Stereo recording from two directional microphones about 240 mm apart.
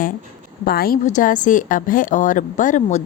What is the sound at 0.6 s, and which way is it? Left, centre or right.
A woman's voice, left.